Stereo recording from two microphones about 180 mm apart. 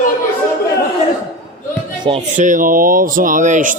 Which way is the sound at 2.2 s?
45° right (ahead or behind).